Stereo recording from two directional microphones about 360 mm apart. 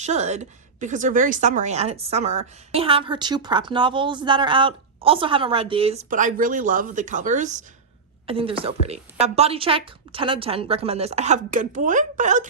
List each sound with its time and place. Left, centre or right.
0.0 s speech: centre